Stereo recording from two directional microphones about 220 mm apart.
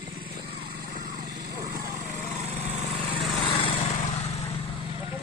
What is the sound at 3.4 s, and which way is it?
Lawn mower, 25° left (ahead or behind).